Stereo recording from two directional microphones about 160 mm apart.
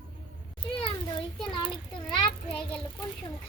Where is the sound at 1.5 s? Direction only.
30° left (ahead or behind).